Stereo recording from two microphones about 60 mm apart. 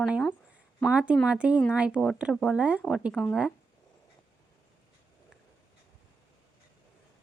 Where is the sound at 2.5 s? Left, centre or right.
Centre.